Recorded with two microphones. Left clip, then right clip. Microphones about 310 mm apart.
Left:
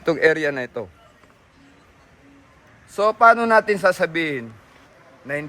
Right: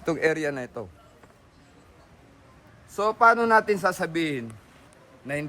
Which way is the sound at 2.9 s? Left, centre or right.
Left.